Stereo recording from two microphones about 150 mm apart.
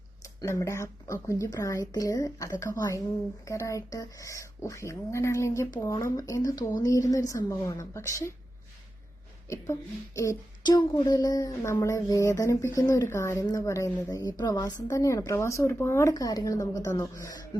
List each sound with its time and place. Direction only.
0.2 s a woman's voice: 20° left (ahead or behind)
10.2 s a woman's voice: 25° left (ahead or behind)